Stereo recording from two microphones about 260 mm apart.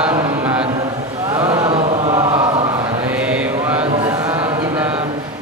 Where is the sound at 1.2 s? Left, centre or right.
Centre.